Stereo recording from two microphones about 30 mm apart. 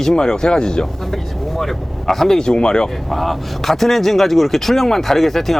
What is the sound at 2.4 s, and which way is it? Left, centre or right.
Speech, left.